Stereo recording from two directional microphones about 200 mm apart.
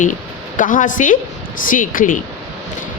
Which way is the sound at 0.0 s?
40° left (ahead or behind).